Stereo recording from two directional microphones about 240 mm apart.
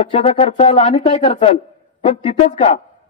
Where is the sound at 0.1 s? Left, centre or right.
Left.